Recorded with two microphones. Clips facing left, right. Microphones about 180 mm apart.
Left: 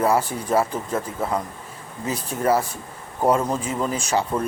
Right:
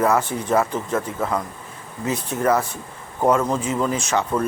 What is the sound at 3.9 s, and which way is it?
Speech, 35° left (ahead or behind).